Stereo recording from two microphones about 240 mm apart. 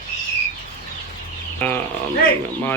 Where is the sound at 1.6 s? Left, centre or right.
Centre.